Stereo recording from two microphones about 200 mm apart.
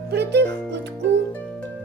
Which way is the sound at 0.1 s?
55° right (ahead or behind).